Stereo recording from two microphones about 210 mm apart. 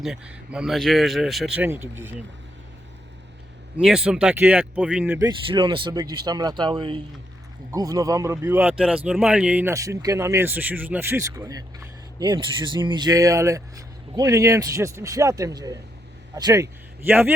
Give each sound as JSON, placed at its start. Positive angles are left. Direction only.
{"t": 0.0, "sound": "speech", "side_deg": -5}
{"t": 3.8, "sound": "speech", "side_deg": -5}
{"t": 5.5, "sound": "a man's voice", "side_deg": -20}